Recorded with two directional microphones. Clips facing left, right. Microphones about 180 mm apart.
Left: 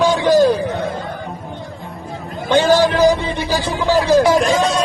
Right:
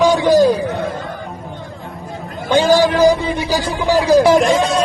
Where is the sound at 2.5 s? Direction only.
10° right (ahead or behind).